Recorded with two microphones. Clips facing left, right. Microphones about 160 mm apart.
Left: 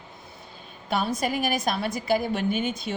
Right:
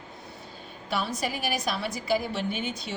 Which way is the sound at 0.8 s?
50° left (ahead or behind).